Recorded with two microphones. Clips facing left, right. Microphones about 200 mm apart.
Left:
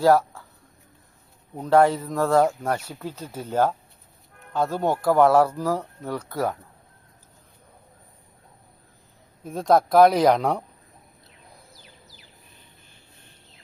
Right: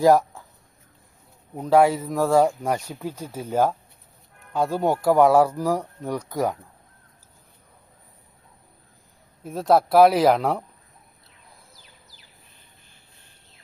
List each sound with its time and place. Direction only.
0.0 s speech: 15° right (ahead or behind)
1.5 s speech: 5° right (ahead or behind)
9.4 s speech: 5° right (ahead or behind)